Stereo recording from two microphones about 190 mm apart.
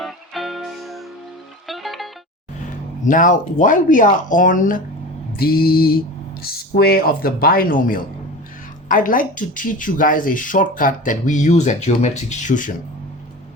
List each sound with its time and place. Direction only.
0.0 s music: centre (ahead or behind)
3.0 s speech: 45° left (ahead or behind)